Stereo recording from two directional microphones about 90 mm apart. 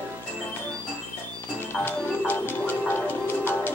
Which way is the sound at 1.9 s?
25° left (ahead or behind).